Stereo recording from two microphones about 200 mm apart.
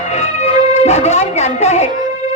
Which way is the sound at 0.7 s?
35° left (ahead or behind).